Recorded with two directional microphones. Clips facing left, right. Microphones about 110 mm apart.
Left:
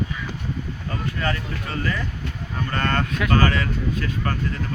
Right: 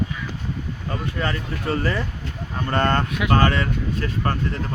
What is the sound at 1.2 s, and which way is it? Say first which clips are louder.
Speech: right 1 dB; 30° right (ahead or behind).